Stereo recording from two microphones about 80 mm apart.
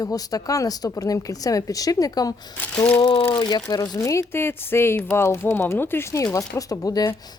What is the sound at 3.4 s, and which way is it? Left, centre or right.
Speech, left.